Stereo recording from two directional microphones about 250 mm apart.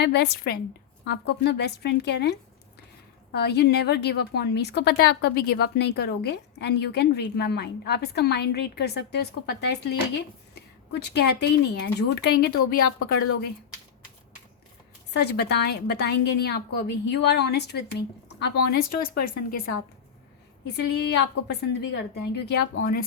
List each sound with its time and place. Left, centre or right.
0.0 s a woman's voice: left
3.3 s a woman's voice: left
15.1 s a woman's voice: left
20.7 s a woman's voice: left